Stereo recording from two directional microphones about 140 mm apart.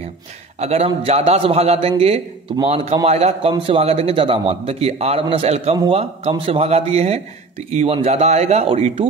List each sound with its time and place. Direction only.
0.6 s speech: 50° right (ahead or behind)